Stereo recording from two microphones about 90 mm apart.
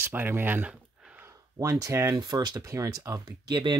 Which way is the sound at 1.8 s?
40° right (ahead or behind).